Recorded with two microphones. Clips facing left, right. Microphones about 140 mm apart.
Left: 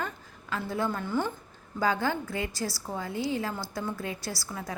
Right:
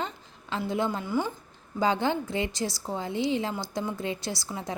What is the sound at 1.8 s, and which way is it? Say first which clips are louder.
A woman's voice: right 2 dB; 20° right (ahead or behind).